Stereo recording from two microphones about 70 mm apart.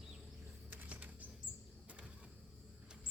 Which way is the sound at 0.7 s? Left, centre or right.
Right.